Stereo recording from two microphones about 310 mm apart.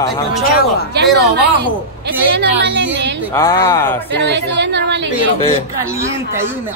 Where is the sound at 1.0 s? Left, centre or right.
Right.